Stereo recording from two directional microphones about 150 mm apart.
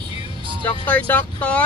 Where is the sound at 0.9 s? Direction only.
10° left (ahead or behind).